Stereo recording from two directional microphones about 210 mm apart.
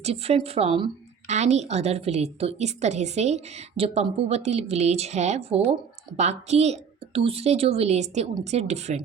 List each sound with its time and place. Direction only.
0.0 s a woman's voice: 30° right (ahead or behind)